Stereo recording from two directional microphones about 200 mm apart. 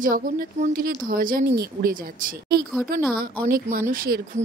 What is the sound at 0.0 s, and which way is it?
Speech, 45° right (ahead or behind).